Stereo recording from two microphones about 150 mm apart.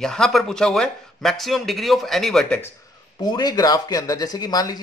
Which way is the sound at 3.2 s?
25° left (ahead or behind).